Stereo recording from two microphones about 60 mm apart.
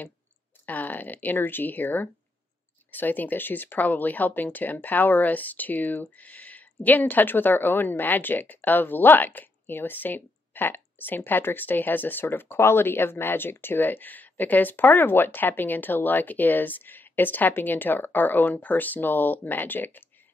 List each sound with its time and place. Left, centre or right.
0.7 s speech: left